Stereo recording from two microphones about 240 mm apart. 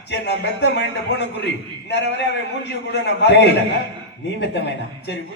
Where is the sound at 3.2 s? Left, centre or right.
Left.